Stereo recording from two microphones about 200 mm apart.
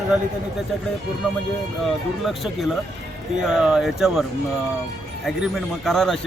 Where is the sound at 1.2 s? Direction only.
Centre (ahead or behind).